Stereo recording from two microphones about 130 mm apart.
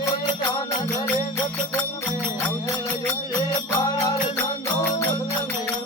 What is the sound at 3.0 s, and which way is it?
Music, 30° left (ahead or behind).